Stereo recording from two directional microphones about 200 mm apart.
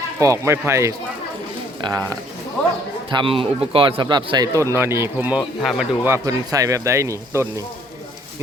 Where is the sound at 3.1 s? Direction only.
25° right (ahead or behind).